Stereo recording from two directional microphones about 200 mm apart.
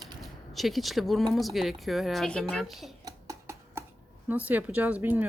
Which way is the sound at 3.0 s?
15° right (ahead or behind).